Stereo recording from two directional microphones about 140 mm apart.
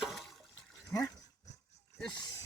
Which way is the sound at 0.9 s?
25° left (ahead or behind).